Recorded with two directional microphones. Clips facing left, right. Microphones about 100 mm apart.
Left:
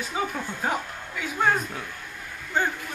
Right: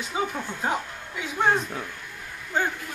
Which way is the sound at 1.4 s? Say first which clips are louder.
Right 1 dB; 15° right (ahead or behind).